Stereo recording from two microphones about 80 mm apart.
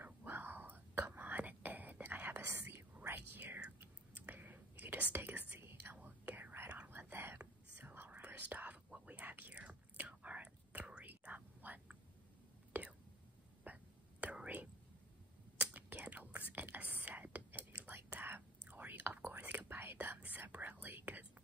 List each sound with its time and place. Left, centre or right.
0.0 s whispering: right